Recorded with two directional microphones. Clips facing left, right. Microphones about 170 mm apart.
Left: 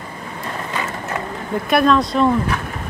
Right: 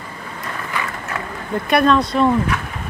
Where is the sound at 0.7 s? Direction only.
20° left (ahead or behind).